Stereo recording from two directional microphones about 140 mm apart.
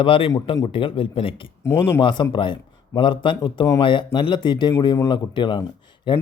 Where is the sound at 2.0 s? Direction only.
35° left (ahead or behind).